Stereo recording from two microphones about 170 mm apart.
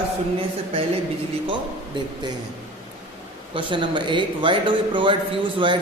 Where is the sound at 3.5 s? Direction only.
30° right (ahead or behind).